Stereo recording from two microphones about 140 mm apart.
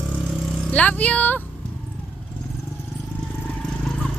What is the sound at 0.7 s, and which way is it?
Speech, 10° left (ahead or behind).